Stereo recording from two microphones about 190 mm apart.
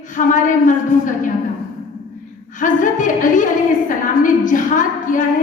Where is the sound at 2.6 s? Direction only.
45° left (ahead or behind).